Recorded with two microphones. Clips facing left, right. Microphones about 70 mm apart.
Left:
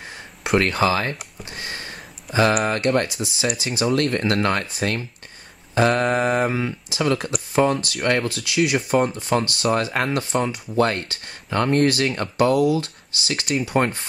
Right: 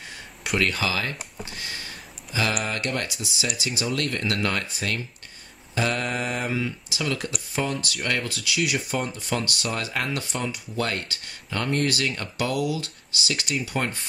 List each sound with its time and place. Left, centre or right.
0.4 s speech: left
1.5 s a sound: left
2.5 s speech: left